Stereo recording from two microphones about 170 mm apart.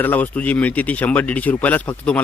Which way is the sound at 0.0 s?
10° left (ahead or behind).